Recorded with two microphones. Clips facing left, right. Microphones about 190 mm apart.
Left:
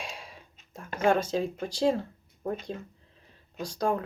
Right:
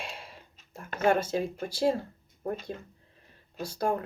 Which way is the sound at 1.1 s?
10° right (ahead or behind).